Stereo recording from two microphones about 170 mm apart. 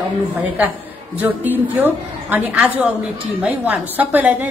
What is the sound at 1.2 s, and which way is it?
A woman's voice, 10° right (ahead or behind).